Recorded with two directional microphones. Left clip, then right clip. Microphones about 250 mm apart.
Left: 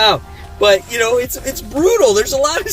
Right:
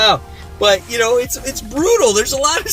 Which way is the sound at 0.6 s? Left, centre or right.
Centre.